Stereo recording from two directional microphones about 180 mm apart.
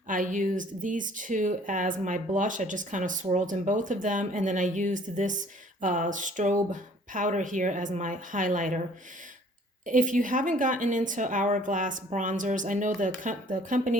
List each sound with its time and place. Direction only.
0.1 s speech: 45° right (ahead or behind)
9.8 s speech: 45° right (ahead or behind)